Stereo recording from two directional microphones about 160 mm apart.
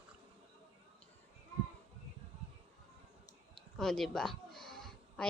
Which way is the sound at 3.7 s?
Centre (ahead or behind).